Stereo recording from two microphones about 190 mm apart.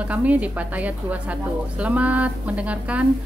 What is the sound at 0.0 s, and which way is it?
A woman's voice, 10° right (ahead or behind).